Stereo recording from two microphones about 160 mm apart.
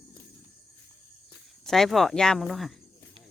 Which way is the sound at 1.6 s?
Centre (ahead or behind).